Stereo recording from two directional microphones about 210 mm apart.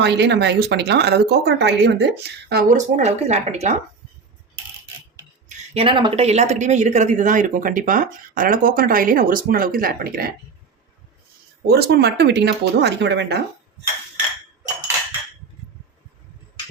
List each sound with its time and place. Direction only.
0.0 s speech: 55° right (ahead or behind); by 3.8 s 30° right (ahead or behind)
5.5 s speech: 25° right (ahead or behind); by 10.3 s 45° right (ahead or behind)
11.6 s speech: 50° right (ahead or behind)